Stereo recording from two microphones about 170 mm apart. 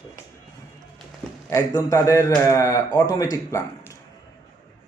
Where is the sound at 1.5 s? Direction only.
20° left (ahead or behind).